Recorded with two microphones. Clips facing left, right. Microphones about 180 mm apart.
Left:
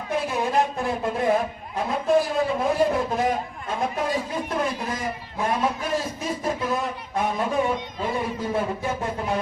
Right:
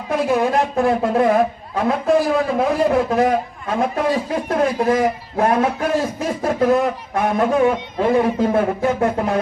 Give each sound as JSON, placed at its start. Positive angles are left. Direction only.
{"t": 0.3, "sound": "a man's voice", "side_deg": -65}